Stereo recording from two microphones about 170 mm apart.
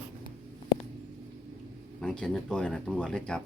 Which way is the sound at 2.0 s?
5° left (ahead or behind).